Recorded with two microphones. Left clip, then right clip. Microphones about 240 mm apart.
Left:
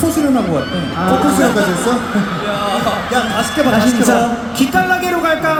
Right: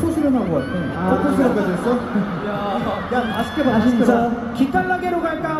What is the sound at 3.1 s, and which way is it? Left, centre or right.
Speech, left.